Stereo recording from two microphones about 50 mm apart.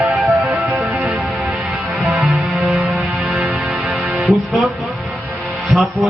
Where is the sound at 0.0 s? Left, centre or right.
Right.